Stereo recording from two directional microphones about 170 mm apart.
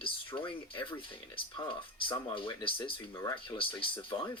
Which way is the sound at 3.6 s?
30° left (ahead or behind).